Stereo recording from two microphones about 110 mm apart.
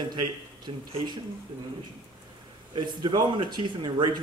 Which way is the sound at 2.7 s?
45° right (ahead or behind).